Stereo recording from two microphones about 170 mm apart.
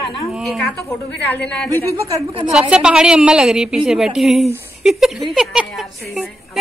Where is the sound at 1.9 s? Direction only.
20° right (ahead or behind).